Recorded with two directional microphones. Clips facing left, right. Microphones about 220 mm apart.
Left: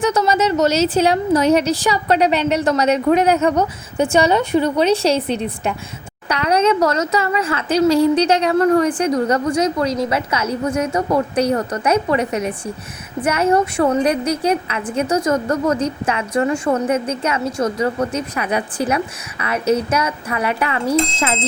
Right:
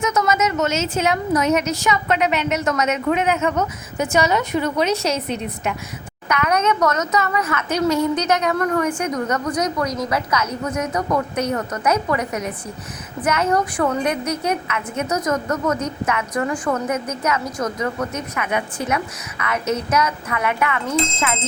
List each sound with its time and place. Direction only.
0.0 s a woman's voice: 30° left (ahead or behind)